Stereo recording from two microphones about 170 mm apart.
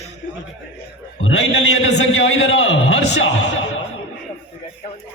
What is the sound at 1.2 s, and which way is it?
A man's voice, 90° left.